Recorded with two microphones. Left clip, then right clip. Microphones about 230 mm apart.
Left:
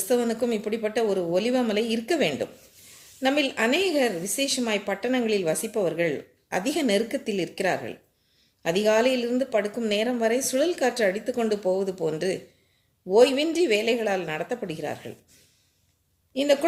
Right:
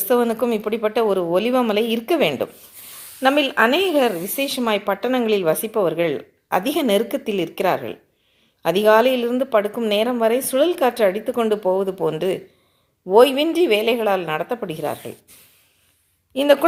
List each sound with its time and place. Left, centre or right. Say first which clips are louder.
0.1 s speech: right 6 dB; right
16.3 s speech: right 7 dB; right